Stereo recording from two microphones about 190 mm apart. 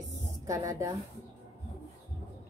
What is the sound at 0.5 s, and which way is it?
Speech, 15° right (ahead or behind).